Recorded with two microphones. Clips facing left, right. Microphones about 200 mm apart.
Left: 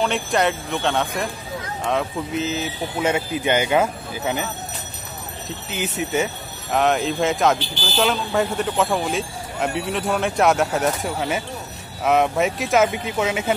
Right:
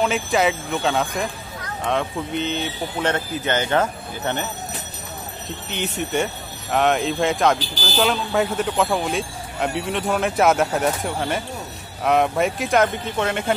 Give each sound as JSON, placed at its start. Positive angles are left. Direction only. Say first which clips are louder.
{"t": 0.0, "sound": "speech", "louder": "right 1 dB", "side_deg": 0}
{"t": 5.7, "sound": "speech", "louder": "left 1 dB", "side_deg": 5}
{"t": 7.5, "sound": "speech", "louder": "even", "side_deg": -40}
{"t": 7.8, "sound": "speech", "louder": "even", "side_deg": 0}